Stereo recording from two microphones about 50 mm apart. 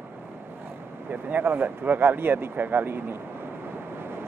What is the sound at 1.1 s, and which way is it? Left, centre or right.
Speech, right.